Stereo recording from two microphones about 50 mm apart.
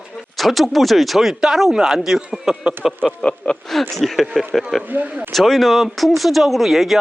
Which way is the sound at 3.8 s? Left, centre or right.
Centre.